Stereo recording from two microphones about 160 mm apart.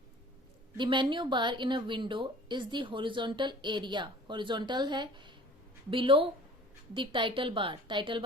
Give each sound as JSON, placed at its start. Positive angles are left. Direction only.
{"t": 0.8, "sound": "a woman's voice", "side_deg": -30}